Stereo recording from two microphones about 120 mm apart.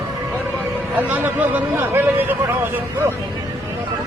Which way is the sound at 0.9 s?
15° right (ahead or behind).